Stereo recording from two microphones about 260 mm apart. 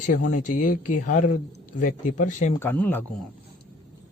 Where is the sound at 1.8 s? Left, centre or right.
Left.